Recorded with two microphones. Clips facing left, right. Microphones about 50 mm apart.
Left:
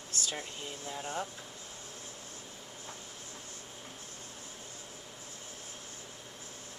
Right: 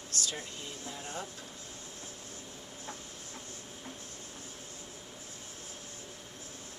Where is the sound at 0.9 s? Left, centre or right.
Centre.